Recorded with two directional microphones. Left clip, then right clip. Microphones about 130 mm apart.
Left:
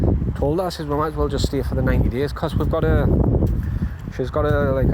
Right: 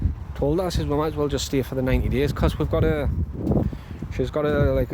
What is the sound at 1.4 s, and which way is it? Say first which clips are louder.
Speech: left 1 dB; 80° right.